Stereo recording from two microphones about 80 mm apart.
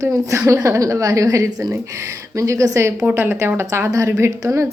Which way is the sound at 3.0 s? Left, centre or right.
Right.